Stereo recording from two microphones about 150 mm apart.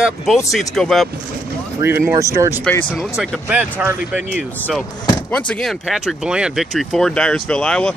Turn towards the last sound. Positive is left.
turn(degrees=5)  # may be behind; listen again after turning